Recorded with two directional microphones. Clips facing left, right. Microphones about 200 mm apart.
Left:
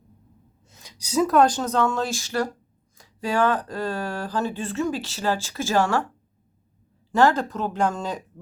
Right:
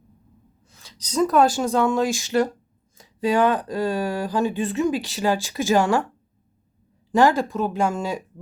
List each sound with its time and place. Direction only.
0.7 s speech: 15° left (ahead or behind); by 6.1 s 15° right (ahead or behind)
7.1 s speech: 15° right (ahead or behind)